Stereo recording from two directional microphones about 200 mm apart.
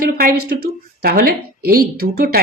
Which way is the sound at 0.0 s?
50° right (ahead or behind).